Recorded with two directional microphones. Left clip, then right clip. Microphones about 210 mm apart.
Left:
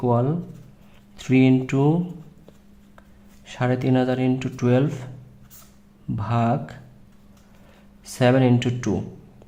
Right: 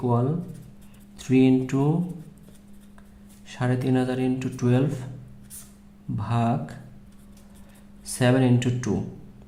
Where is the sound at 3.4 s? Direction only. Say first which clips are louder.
Left 4 dB; 25° left (ahead or behind).